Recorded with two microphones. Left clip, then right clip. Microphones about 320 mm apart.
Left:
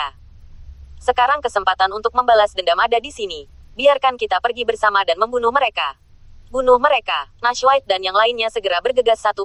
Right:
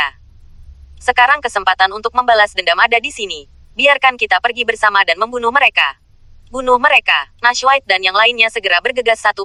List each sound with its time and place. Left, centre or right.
0.9 s speech: right